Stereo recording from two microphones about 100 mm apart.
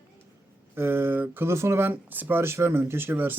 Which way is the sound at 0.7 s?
20° right (ahead or behind).